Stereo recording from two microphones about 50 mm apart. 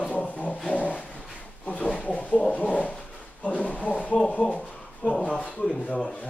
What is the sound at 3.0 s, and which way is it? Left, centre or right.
Drawer open or close, left.